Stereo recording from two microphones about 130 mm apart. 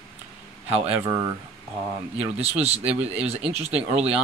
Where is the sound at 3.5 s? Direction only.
55° right (ahead or behind).